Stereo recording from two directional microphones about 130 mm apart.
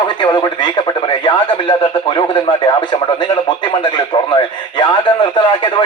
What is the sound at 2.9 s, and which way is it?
Speech, 40° left (ahead or behind).